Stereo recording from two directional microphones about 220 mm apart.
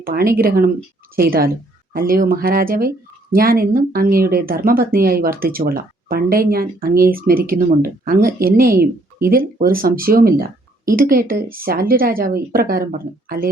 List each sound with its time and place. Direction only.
0.0 s a woman's voice: 40° right (ahead or behind)